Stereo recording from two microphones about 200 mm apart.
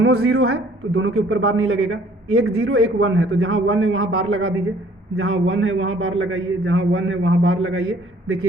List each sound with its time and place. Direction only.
0.0 s a man's voice: 90° right
5.2 s a man's voice: 75° right (ahead or behind)